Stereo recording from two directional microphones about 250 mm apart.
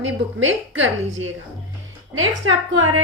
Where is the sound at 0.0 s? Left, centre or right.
Right.